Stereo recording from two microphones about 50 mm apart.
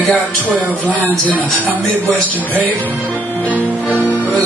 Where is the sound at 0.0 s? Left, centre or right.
Left.